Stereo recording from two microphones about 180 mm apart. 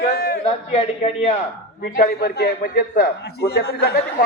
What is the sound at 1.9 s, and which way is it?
A man's voice, 55° left (ahead or behind).